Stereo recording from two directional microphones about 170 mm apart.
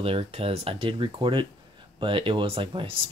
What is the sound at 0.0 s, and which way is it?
Speech, 35° right (ahead or behind).